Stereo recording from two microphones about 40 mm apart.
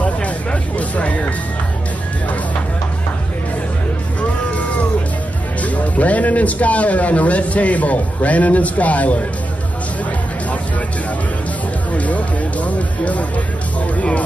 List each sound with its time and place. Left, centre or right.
0.0 s music: left
4.2 s music: left
5.6 s speech: left
11.9 s music: left
13.9 s speech: left